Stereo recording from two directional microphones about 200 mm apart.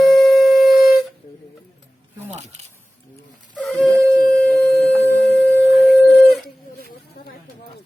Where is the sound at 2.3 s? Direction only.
35° right (ahead or behind).